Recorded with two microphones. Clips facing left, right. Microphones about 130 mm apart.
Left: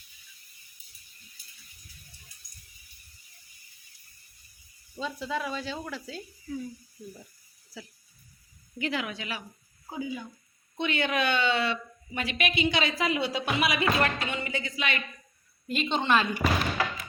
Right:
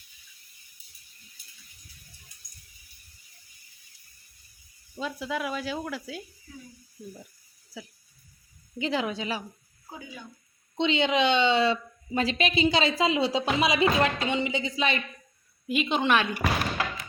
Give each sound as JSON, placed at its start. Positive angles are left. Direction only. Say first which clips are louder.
{"t": 4.9, "sound": "speech", "louder": "right 1 dB", "side_deg": -5}
{"t": 8.8, "sound": "a woman's voice", "louder": "right 4 dB", "side_deg": -30}
{"t": 10.8, "sound": "a woman's voice", "louder": "right 4 dB", "side_deg": -20}
{"t": 15.6, "sound": "speech", "louder": "right 3 dB", "side_deg": -5}